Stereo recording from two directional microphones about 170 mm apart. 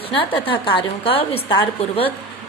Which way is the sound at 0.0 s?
30° left (ahead or behind).